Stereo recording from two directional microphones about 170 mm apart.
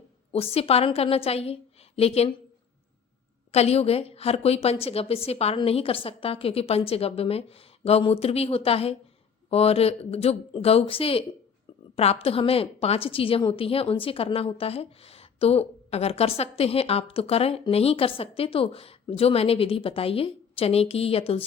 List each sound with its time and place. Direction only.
0.3 s a woman's voice: 35° left (ahead or behind)
3.5 s a woman's voice: 40° left (ahead or behind)